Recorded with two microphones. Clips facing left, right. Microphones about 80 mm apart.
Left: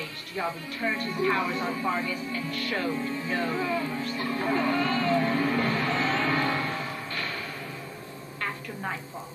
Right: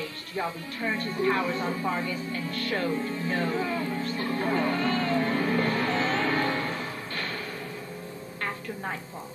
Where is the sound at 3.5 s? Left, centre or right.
Centre.